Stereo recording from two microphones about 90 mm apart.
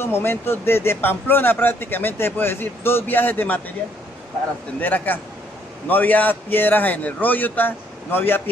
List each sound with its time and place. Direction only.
0.0 s a man's voice: 25° left (ahead or behind)
4.7 s a man's voice: 20° left (ahead or behind)